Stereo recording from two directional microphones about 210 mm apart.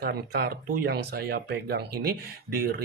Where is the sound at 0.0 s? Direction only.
50° right (ahead or behind).